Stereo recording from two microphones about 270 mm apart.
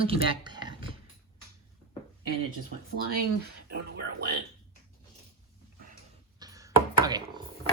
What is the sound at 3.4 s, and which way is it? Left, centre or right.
Music, right.